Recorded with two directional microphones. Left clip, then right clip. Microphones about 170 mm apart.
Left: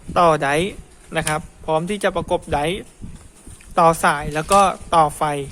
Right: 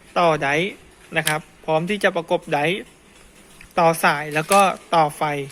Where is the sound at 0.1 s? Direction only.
15° left (ahead or behind).